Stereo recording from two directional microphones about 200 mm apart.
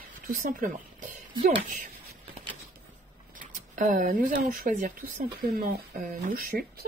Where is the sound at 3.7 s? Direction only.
40° right (ahead or behind).